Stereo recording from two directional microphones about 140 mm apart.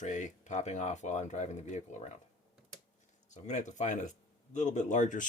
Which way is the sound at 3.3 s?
60° left (ahead or behind).